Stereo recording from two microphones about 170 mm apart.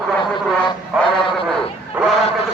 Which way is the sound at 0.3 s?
30° left (ahead or behind).